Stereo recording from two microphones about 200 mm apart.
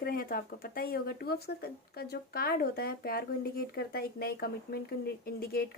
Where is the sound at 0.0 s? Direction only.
45° left (ahead or behind).